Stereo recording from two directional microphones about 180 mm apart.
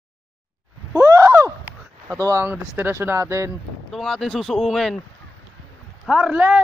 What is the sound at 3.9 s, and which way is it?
Speech, centre (ahead or behind).